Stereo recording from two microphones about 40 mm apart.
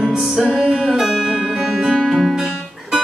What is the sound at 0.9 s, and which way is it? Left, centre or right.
Music, centre.